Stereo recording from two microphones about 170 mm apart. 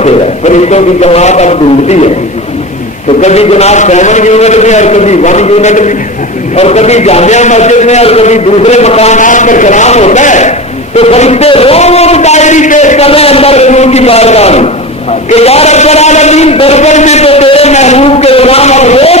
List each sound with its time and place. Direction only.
0.0 s speech: 40° left (ahead or behind)
3.2 s a man's voice: 40° left (ahead or behind)